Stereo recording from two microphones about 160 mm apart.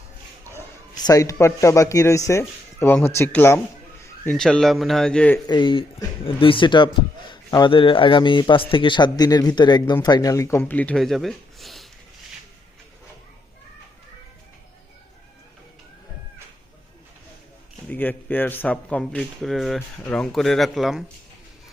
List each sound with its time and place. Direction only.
0.5 s speech: 25° left (ahead or behind)
4.4 s speech: 5° left (ahead or behind)
5.5 s speech: 30° left (ahead or behind); by 11.9 s centre (ahead or behind)
17.8 s speech: 10° left (ahead or behind)